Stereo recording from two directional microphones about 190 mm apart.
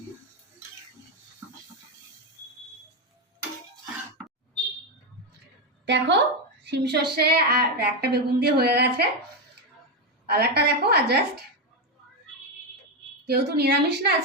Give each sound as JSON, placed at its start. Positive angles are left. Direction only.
{"t": 5.8, "sound": "a woman's voice", "side_deg": -65}
{"t": 10.2, "sound": "a woman's voice", "side_deg": -55}
{"t": 13.2, "sound": "a woman's voice", "side_deg": -60}